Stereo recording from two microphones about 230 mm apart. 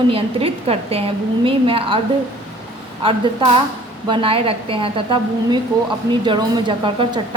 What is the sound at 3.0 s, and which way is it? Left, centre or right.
A woman's voice, right.